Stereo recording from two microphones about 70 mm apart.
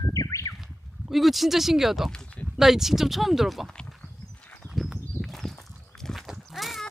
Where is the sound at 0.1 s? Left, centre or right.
Left.